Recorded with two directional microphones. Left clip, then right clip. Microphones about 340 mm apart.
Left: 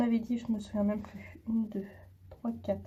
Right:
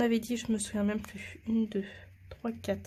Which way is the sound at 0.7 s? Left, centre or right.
Right.